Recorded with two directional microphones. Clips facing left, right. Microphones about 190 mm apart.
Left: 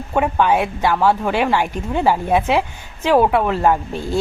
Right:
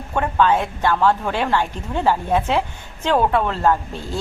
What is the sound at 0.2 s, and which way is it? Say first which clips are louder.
A woman's voice: left 2 dB; 10° left (ahead or behind).